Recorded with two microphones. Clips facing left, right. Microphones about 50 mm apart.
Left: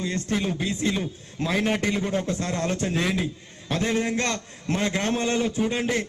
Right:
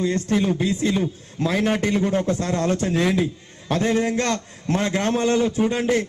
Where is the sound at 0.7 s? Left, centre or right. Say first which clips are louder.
Right 4 dB; left.